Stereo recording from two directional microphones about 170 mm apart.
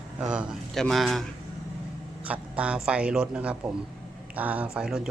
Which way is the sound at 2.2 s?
5° right (ahead or behind).